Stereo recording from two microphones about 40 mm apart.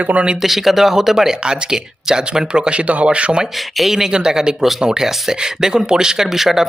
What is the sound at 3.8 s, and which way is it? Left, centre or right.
Speech, centre.